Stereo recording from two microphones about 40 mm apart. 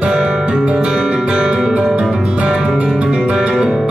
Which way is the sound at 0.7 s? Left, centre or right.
Right.